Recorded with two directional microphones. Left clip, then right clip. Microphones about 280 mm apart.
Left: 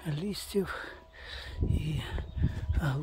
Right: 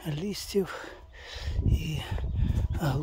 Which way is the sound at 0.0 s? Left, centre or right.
Centre.